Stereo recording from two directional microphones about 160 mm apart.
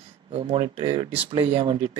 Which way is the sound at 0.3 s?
35° right (ahead or behind).